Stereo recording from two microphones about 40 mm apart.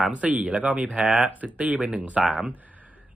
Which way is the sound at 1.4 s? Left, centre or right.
Right.